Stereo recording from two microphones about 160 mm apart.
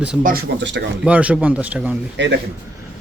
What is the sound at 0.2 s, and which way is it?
Speech, 65° right (ahead or behind).